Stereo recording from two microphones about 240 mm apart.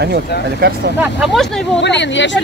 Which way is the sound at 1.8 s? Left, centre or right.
Left.